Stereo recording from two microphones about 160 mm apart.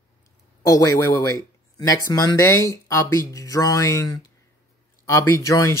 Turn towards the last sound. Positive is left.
turn(degrees=20)  # may be behind; listen again after turning